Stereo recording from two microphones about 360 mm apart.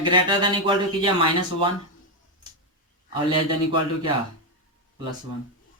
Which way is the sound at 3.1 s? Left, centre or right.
Centre.